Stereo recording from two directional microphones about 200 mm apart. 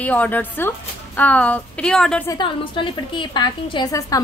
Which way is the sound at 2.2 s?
25° left (ahead or behind).